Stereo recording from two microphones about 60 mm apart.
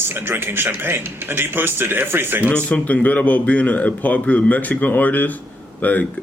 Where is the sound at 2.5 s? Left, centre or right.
Left.